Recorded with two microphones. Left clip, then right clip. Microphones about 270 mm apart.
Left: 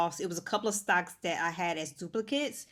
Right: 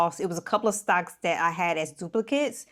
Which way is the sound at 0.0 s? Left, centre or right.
Right.